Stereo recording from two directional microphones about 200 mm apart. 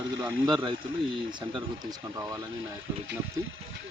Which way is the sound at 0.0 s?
15° right (ahead or behind).